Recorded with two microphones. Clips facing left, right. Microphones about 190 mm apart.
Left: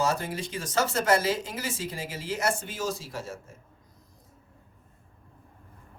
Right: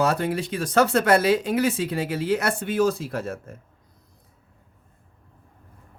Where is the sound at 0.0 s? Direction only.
60° right (ahead or behind).